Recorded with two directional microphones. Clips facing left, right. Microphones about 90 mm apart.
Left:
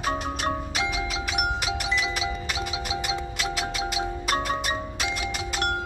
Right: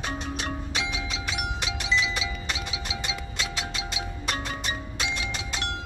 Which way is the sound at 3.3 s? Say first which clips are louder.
Left 4 dB; 5° left (ahead or behind).